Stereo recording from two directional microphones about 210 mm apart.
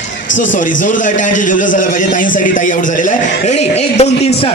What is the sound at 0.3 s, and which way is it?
Speech, 60° left (ahead or behind).